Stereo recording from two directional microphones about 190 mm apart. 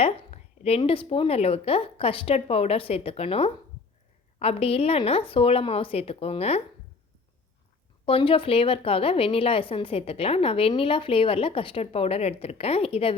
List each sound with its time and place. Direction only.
0.0 s a woman's voice: 30° left (ahead or behind)
8.0 s a woman's voice: 30° left (ahead or behind)